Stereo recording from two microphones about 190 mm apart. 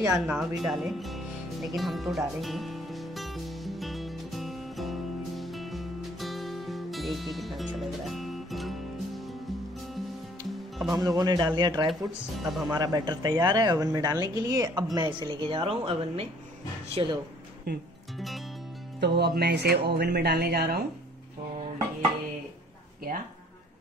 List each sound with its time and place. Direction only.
0.1 s speech: 5° right (ahead or behind)
1.8 s music: centre (ahead or behind)
10.9 s speech: 20° right (ahead or behind)
11.9 s speech: centre (ahead or behind)
12.7 s speech: 20° right (ahead or behind)
17.7 s speech: 60° right (ahead or behind)
18.9 s speech: 60° right (ahead or behind)